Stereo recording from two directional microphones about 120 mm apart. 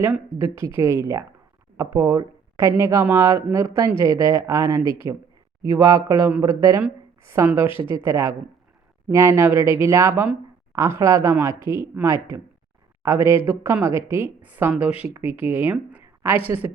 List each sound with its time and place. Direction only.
0.4 s speech: 25° right (ahead or behind)